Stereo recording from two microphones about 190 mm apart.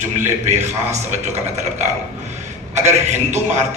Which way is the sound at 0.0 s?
40° right (ahead or behind).